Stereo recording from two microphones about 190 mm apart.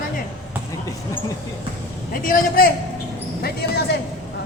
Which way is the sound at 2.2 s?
50° left (ahead or behind).